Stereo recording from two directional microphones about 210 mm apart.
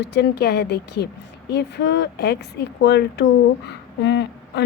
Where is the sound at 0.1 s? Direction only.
50° left (ahead or behind).